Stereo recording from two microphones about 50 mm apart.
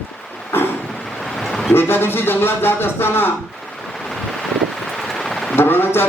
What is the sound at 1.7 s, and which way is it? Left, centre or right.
Speech, left.